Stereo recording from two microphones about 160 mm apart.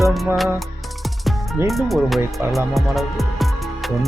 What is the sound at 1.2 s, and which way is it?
Speech, centre (ahead or behind).